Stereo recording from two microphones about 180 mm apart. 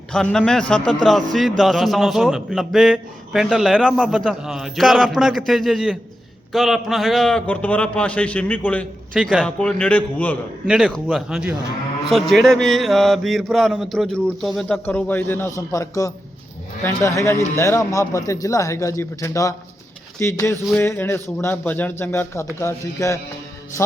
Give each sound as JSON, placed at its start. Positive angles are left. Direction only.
{"t": 0.1, "sound": "a man's voice", "side_deg": 5}
{"t": 10.7, "sound": "a man's voice", "side_deg": -5}